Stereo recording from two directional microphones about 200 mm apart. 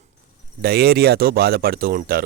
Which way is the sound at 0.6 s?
50° right (ahead or behind).